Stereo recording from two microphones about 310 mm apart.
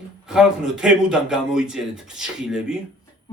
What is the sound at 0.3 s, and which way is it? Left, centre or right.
A man's voice, centre.